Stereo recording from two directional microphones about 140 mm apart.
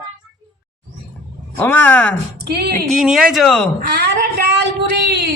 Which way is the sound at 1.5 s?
10° left (ahead or behind).